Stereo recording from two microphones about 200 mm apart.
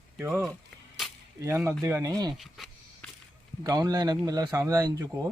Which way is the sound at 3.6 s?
15° right (ahead or behind).